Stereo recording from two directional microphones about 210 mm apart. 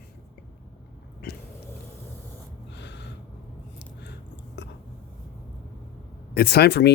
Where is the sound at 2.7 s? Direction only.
55° left (ahead or behind).